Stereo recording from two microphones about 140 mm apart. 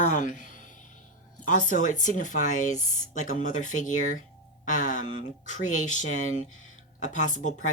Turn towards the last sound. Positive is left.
turn(degrees=65)  # may be behind; listen again after turning